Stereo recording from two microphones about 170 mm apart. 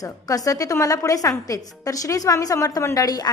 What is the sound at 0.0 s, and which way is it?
A woman's voice, 20° left (ahead or behind).